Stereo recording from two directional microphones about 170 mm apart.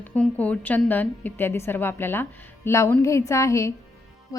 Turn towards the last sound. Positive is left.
turn(degrees=20)  # may be behind; listen again after turning